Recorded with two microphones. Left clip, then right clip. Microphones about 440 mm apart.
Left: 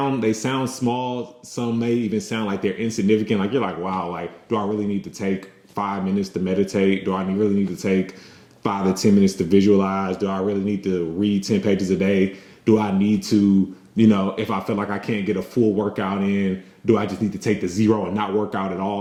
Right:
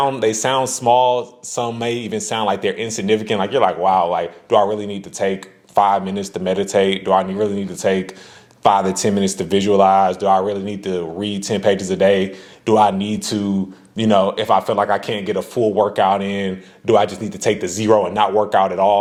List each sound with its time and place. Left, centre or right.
0.0 s speech: right